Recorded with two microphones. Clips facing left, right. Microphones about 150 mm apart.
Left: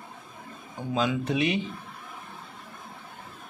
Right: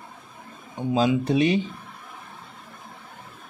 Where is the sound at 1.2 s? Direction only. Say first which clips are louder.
Right 5 dB; 35° right (ahead or behind).